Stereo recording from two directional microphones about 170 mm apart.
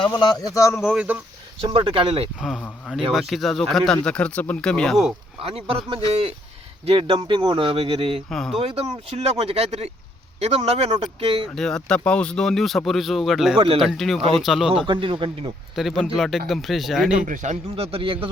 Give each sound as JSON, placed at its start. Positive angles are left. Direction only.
{"t": 0.2, "sound": "a man's voice", "side_deg": 25}
{"t": 0.7, "sound": "speech", "side_deg": 5}
{"t": 1.6, "sound": "speech", "side_deg": -30}
{"t": 2.4, "sound": "speech", "side_deg": 0}
{"t": 5.4, "sound": "speech", "side_deg": -35}
{"t": 8.3, "sound": "speech", "side_deg": 0}
{"t": 8.6, "sound": "speech", "side_deg": -35}
{"t": 11.5, "sound": "speech", "side_deg": 5}
{"t": 13.6, "sound": "speech", "side_deg": -30}
{"t": 13.8, "sound": "speech", "side_deg": 0}
{"t": 14.8, "sound": "a man's voice", "side_deg": -30}
{"t": 15.7, "sound": "speech", "side_deg": 0}
{"t": 17.2, "sound": "speech", "side_deg": -45}